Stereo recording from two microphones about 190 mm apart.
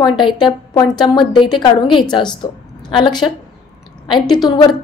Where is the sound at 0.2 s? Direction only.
25° left (ahead or behind).